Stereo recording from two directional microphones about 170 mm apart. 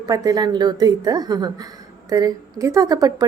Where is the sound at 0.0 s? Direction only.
20° right (ahead or behind).